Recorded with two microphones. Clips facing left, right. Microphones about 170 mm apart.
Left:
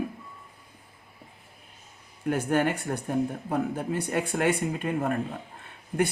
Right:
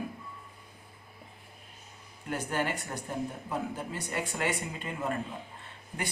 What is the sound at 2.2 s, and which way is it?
Speech, 55° left (ahead or behind).